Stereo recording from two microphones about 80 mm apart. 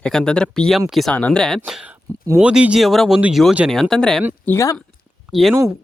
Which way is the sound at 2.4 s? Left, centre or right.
Centre.